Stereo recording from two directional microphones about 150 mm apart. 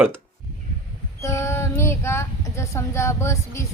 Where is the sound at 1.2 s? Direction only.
20° left (ahead or behind).